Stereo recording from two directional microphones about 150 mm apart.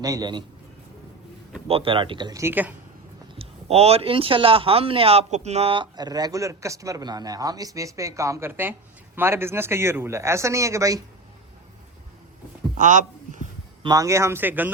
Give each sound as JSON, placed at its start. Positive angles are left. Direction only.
{"t": 0.0, "sound": "speech", "side_deg": -25}
{"t": 1.6, "sound": "speech", "side_deg": -40}
{"t": 2.4, "sound": "speech", "side_deg": -15}
{"t": 3.3, "sound": "speech", "side_deg": -45}
{"t": 12.8, "sound": "a sound", "side_deg": -55}
{"t": 13.8, "sound": "speech", "side_deg": -25}